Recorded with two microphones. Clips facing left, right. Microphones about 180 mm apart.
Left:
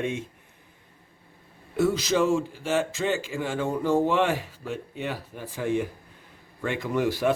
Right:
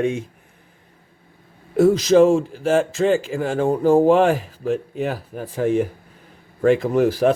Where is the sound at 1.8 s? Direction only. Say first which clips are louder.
Right 10 dB; 40° right (ahead or behind).